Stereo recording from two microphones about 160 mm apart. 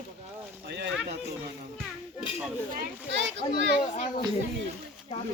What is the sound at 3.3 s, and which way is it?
Speech, 90° right.